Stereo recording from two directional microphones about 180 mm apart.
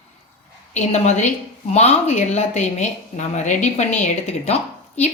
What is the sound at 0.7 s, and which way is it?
Speech, 40° left (ahead or behind).